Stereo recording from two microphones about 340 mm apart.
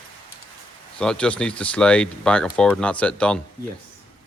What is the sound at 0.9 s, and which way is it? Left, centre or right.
Speech, centre.